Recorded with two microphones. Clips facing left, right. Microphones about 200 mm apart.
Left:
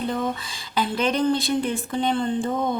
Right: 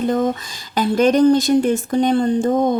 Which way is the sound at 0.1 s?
40° right (ahead or behind).